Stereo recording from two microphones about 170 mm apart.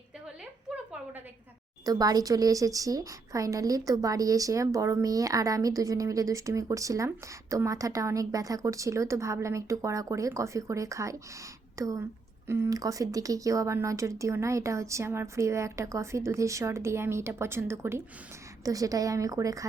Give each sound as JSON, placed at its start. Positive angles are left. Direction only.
{"t": 1.8, "sound": "a woman's voice", "side_deg": -20}